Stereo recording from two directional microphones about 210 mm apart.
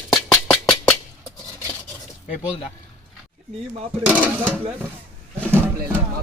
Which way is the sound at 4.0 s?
10° right (ahead or behind).